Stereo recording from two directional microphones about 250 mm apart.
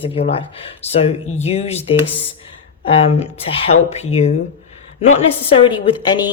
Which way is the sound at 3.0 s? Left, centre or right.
Left.